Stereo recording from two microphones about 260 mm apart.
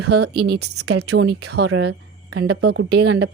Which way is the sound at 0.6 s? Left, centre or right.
Right.